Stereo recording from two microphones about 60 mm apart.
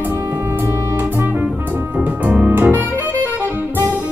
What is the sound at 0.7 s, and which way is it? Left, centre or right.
Music, right.